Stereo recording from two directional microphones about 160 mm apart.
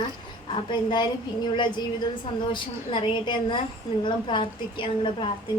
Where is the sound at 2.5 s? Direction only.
30° left (ahead or behind).